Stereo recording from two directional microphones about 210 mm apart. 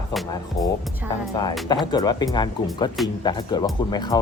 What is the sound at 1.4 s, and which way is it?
Speech, 20° left (ahead or behind).